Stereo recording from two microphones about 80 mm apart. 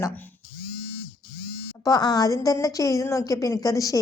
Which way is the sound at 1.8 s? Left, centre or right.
Left.